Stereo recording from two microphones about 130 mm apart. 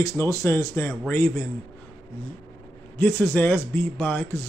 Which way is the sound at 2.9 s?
15° left (ahead or behind).